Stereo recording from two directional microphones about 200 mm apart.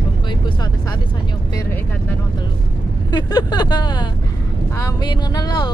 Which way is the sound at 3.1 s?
20° left (ahead or behind).